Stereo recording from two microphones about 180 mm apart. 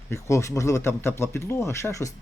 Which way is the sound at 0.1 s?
15° left (ahead or behind).